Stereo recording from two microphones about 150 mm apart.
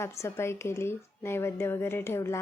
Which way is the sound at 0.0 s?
20° left (ahead or behind).